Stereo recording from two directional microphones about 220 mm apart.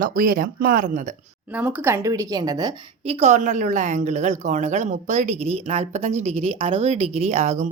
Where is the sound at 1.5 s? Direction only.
10° right (ahead or behind).